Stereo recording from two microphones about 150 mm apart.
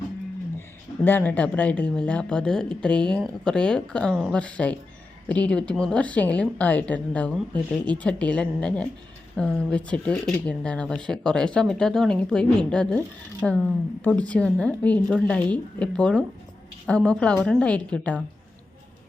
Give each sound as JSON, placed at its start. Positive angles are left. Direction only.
{"t": 1.0, "sound": "a woman's voice", "side_deg": 10}